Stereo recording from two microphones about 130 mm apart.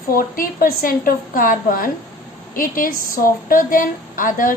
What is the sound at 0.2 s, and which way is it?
A woman's voice, 90° left.